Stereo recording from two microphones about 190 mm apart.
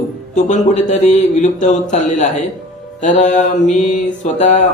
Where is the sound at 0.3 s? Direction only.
40° left (ahead or behind).